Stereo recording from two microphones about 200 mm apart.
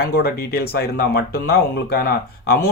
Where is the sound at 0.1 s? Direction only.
50° left (ahead or behind).